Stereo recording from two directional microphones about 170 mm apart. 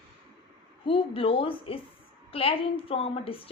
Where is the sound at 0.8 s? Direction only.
35° left (ahead or behind).